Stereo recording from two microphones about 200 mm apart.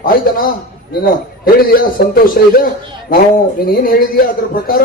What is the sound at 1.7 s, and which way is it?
Speech, 45° left (ahead or behind).